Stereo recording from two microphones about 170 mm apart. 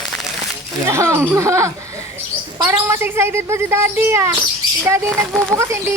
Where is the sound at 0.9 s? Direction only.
15° right (ahead or behind).